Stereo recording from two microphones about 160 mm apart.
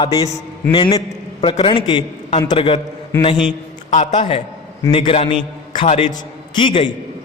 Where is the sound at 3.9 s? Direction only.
50° left (ahead or behind).